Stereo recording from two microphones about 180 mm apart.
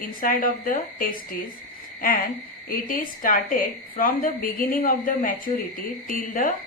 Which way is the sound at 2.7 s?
50° left (ahead or behind).